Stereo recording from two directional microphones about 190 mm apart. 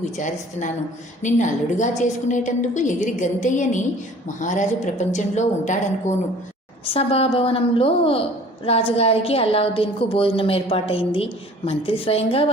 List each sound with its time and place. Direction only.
0.2 s a woman's voice: 40° left (ahead or behind)